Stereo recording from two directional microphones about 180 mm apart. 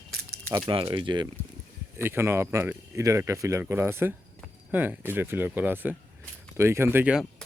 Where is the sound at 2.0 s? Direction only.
15° right (ahead or behind).